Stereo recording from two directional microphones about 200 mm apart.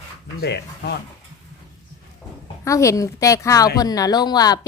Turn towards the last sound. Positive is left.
turn(degrees=20)  # may be behind; listen again after turning